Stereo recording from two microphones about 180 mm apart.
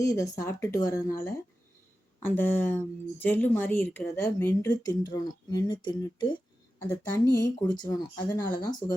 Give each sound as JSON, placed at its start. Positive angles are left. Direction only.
{"t": 0.0, "sound": "a woman's voice", "side_deg": 20}